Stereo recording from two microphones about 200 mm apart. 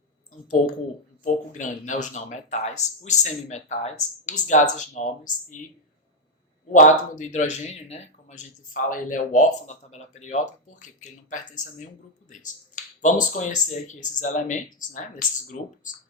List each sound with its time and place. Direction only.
1.2 s a man's voice: 40° left (ahead or behind)
6.7 s a man's voice: 40° left (ahead or behind)